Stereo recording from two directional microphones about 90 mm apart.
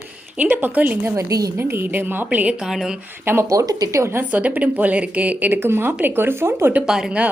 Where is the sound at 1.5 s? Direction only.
25° right (ahead or behind); by 2.9 s 5° right (ahead or behind).